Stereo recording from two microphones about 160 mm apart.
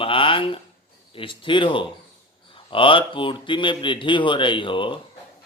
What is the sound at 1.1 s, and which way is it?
Speech, 30° left (ahead or behind).